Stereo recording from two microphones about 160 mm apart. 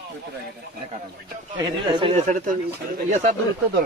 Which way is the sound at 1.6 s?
30° right (ahead or behind).